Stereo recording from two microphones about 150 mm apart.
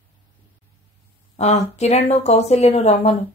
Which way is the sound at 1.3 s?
45° left (ahead or behind).